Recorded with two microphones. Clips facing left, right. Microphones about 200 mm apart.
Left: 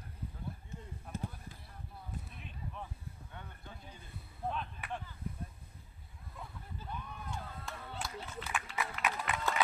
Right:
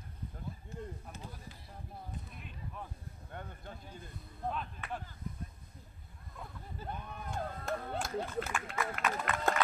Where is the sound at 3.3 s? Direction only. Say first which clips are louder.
Right 8 dB; 50° right (ahead or behind).